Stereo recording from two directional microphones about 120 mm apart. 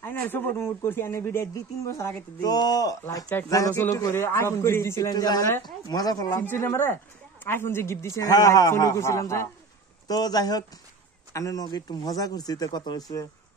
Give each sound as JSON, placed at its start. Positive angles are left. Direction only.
{"t": 0.0, "sound": "speech", "side_deg": 15}
{"t": 2.5, "sound": "speech", "side_deg": 35}
{"t": 5.1, "sound": "speech", "side_deg": 35}
{"t": 6.5, "sound": "speech", "side_deg": 20}